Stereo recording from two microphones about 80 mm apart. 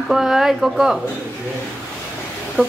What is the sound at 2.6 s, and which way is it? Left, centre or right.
Speech, centre.